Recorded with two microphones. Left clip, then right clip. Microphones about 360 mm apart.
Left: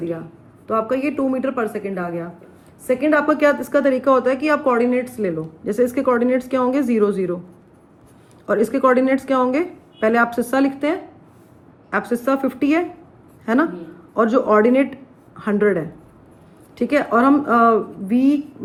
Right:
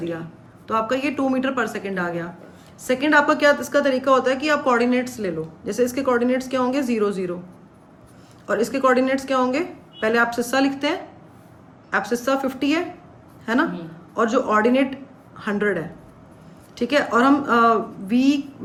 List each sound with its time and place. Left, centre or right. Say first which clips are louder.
0.7 s a woman's voice: left 2 dB; centre
8.4 s a woman's voice: left 3 dB; centre